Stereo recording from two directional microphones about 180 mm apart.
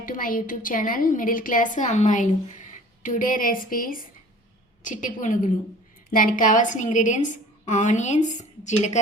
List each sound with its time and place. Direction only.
0.0 s a woman's voice: 50° left (ahead or behind)